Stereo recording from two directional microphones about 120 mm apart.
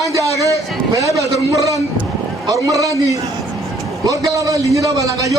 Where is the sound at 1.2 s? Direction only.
25° right (ahead or behind).